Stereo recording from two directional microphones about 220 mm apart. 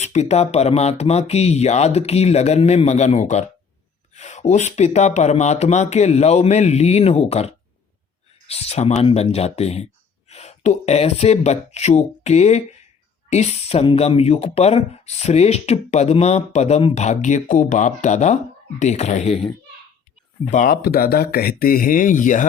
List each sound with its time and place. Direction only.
0.0 s speech: 30° left (ahead or behind)
20.5 s speech: 40° left (ahead or behind)